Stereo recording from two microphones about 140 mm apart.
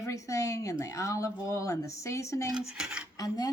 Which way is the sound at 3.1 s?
25° left (ahead or behind).